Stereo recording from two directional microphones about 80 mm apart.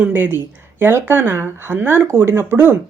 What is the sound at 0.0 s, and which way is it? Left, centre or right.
Speech, right.